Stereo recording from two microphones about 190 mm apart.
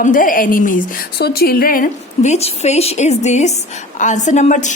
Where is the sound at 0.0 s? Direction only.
45° left (ahead or behind).